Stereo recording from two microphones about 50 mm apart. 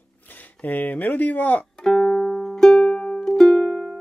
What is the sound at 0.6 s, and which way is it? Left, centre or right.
Speech, left.